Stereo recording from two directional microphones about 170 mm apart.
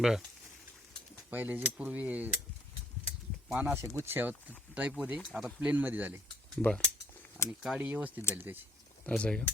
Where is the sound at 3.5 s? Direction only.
10° right (ahead or behind).